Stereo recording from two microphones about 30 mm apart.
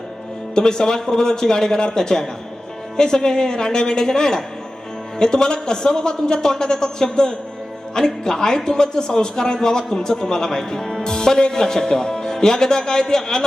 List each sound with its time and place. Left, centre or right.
0.5 s a man's voice: left